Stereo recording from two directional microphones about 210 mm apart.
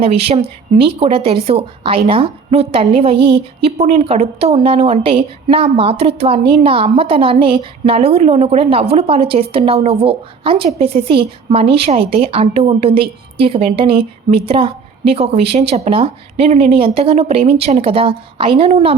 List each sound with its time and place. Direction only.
0.0 s a woman's voice: 30° right (ahead or behind)